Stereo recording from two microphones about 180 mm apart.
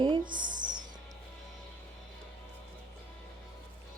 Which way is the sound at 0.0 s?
25° right (ahead or behind).